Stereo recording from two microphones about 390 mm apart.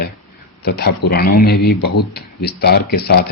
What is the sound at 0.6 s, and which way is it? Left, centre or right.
Speech, left.